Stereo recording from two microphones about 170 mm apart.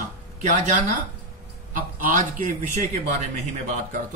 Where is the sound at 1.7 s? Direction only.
55° right (ahead or behind).